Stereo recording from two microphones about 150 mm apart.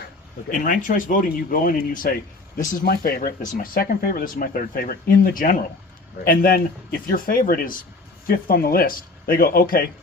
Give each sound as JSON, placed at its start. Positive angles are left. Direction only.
{"t": 0.5, "sound": "speech", "side_deg": 60}
{"t": 2.7, "sound": "speech", "side_deg": 85}
{"t": 6.2, "sound": "speech", "side_deg": 75}
{"t": 8.3, "sound": "speech", "side_deg": 85}